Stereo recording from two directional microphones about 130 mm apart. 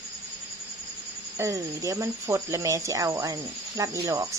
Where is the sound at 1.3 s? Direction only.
25° right (ahead or behind).